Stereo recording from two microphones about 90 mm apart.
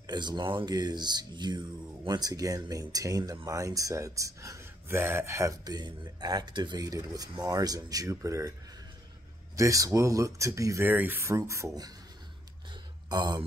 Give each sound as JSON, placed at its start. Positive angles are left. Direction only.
{"t": 0.0, "sound": "speech", "side_deg": -50}
{"t": 5.6, "sound": "speech", "side_deg": -50}
{"t": 9.6, "sound": "speech", "side_deg": -35}
{"t": 10.8, "sound": "speech", "side_deg": -20}
{"t": 13.1, "sound": "speech", "side_deg": -50}